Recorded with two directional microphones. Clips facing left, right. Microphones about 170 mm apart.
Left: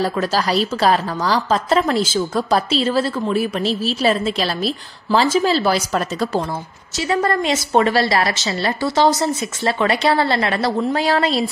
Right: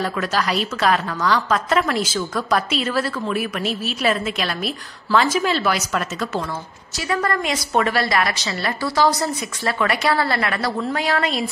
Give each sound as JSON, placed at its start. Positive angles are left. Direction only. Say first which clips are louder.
{"t": 0.0, "sound": "a woman's voice", "louder": "left 3 dB", "side_deg": 30}